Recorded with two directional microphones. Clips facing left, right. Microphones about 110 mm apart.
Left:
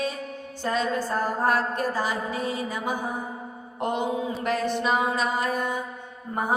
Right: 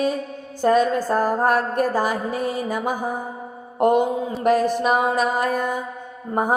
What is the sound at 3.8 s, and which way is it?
A woman's voice, 45° right (ahead or behind).